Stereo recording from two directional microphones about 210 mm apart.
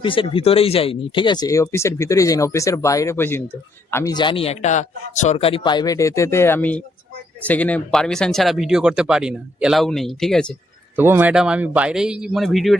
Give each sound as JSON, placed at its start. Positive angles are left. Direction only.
{"t": 0.0, "sound": "a man's voice", "side_deg": 25}
{"t": 10.9, "sound": "speech", "side_deg": -10}